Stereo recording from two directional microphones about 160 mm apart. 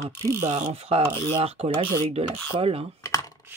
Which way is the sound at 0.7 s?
40° right (ahead or behind).